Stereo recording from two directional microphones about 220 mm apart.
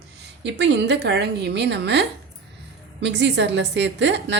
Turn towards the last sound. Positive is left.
turn(degrees=-55)  # may be behind; listen again after turning